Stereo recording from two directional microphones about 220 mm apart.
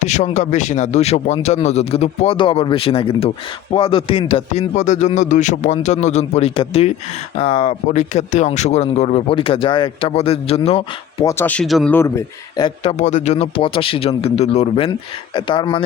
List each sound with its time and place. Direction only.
0.0 s speech: 30° left (ahead or behind)
11.3 s speech: 10° left (ahead or behind)
11.9 s speech: 15° left (ahead or behind)